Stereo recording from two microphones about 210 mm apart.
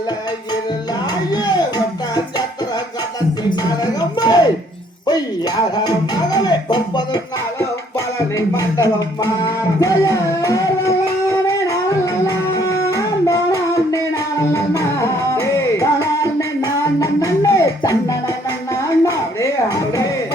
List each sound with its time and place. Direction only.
1.3 s music: 20° left (ahead or behind)
3.5 s a sound: 20° left (ahead or behind)
7.9 s music: 15° left (ahead or behind)